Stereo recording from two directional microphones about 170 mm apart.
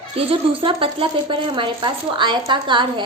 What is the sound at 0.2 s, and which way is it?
A woman's voice, 30° right (ahead or behind).